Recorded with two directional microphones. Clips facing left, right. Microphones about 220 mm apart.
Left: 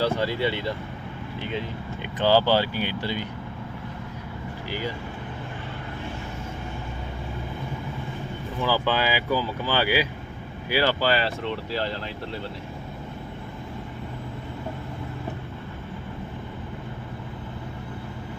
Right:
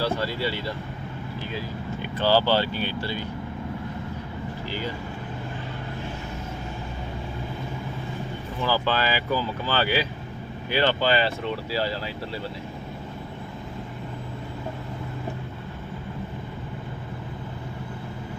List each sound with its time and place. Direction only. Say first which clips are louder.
0.0 s speech: left 2 dB; 20° left (ahead or behind)
8.6 s speech: left 1 dB; 15° left (ahead or behind); by 12.4 s 5° right (ahead or behind)